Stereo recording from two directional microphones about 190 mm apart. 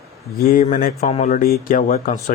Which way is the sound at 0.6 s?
45° left (ahead or behind).